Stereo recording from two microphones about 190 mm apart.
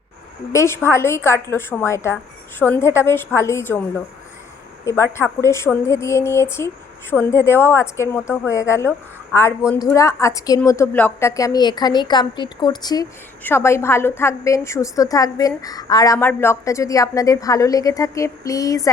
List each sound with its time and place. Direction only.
0.5 s a woman's voice: 15° left (ahead or behind)